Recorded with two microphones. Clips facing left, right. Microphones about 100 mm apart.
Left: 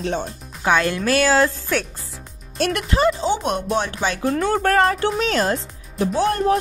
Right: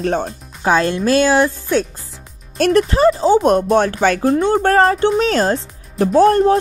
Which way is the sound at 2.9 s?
35° right (ahead or behind).